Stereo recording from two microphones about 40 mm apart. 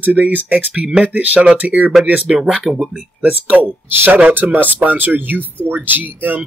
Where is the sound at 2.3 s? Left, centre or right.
Right.